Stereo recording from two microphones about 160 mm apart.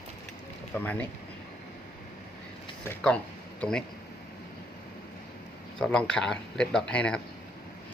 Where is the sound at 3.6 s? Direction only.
5° left (ahead or behind).